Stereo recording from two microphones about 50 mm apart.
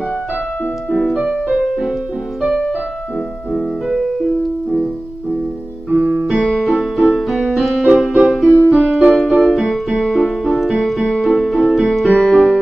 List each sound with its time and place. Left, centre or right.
1.1 s music: centre
3.9 s music: centre
5.9 s music: centre
6.1 s piano: centre
6.6 s keyboard: centre